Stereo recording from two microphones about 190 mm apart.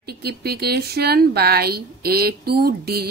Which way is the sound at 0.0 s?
55° right (ahead or behind).